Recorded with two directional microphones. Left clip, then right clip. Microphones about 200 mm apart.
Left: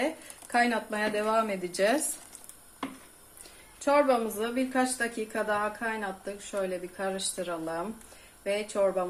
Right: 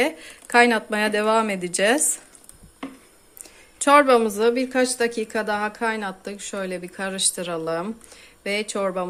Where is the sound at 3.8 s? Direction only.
50° right (ahead or behind).